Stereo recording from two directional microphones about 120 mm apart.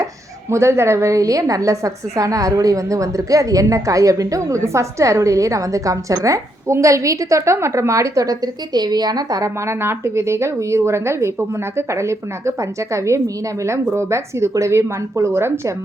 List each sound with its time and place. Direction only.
0.5 s a woman's voice: 20° right (ahead or behind)